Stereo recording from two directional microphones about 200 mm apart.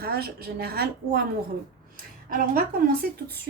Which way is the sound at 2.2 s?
45° right (ahead or behind).